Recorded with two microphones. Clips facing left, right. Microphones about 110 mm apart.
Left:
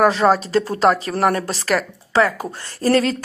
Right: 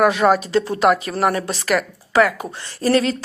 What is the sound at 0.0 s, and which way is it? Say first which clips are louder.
Speech: even; 35° left (ahead or behind).